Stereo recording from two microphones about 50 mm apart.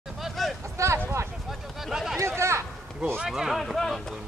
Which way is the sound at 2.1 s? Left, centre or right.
Right.